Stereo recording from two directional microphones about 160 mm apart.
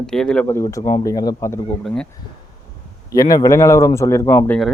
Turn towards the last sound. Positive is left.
turn(degrees=15)  # may be behind; listen again after turning